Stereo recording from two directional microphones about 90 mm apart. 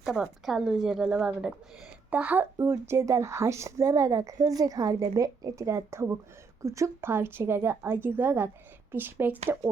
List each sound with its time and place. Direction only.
0.0 s a woman's voice: centre (ahead or behind); by 2.5 s 20° right (ahead or behind)
2.6 s a woman's voice: 30° right (ahead or behind)